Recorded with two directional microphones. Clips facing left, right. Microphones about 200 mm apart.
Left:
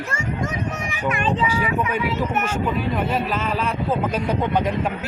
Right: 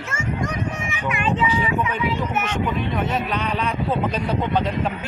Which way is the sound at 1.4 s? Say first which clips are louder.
Even; 10° left (ahead or behind).